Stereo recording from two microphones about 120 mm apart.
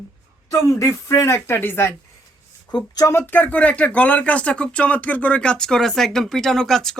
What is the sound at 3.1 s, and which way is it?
Speech, 15° left (ahead or behind).